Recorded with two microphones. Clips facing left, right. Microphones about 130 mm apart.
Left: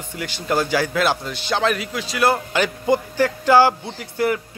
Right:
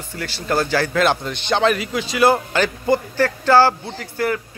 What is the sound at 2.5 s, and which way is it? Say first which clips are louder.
A man's voice: right 1 dB; 15° left (ahead or behind).